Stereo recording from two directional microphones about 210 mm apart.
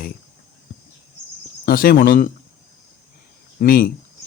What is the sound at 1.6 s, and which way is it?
Speech, 45° left (ahead or behind).